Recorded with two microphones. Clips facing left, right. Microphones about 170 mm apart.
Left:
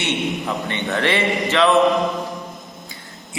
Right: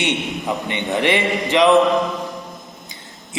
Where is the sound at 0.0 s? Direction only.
15° right (ahead or behind).